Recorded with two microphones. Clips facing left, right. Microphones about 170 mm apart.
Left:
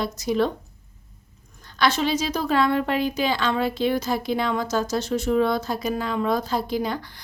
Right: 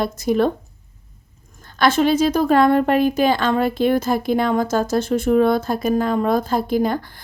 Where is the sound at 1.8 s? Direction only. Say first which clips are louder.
Right 6 dB; 50° right (ahead or behind).